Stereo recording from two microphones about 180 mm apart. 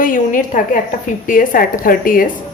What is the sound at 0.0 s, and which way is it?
A woman's voice, 50° left (ahead or behind).